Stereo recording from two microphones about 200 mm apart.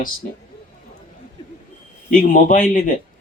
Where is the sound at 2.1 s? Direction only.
40° left (ahead or behind).